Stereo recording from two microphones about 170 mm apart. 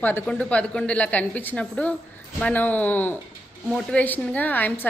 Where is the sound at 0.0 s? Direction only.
10° left (ahead or behind).